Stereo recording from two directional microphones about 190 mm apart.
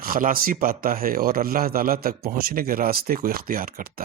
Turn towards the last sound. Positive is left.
turn(degrees=-50)  # may be behind; listen again after turning